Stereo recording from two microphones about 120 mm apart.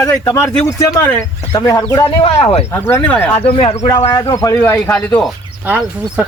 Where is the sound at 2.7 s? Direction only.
15° left (ahead or behind).